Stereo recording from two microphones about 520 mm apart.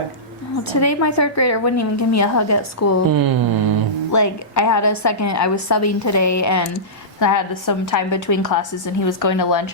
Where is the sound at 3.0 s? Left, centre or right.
Right.